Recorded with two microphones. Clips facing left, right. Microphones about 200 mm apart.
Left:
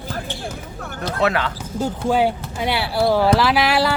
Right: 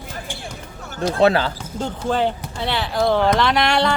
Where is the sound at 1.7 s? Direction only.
10° left (ahead or behind).